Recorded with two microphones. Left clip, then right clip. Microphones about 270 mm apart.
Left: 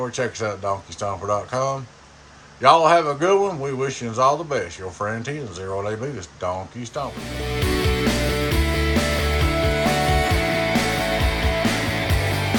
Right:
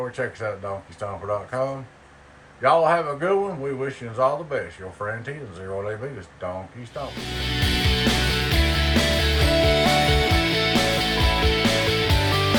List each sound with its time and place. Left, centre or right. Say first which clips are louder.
0.0 s a man's voice: left 3 dB; centre
7.4 s music: left 1 dB; centre